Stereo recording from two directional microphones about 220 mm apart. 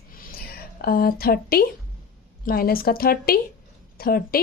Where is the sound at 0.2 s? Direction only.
40° left (ahead or behind).